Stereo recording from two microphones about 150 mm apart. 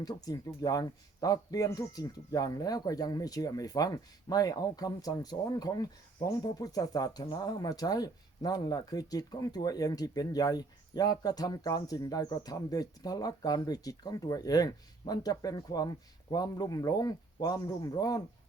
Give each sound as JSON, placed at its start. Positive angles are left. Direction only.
{"t": 0.0, "sound": "speech", "side_deg": 25}